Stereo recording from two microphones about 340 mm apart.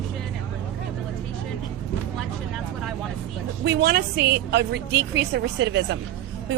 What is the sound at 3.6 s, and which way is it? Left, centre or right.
A woman's voice, right.